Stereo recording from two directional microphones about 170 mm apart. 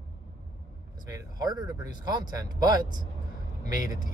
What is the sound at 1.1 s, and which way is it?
Vehicle, 25° right (ahead or behind).